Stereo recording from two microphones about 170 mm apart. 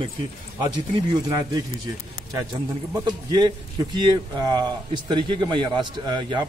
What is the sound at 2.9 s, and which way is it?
A man's voice, 25° right (ahead or behind).